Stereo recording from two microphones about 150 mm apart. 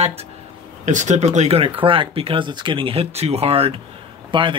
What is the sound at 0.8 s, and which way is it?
Speech, 50° right (ahead or behind).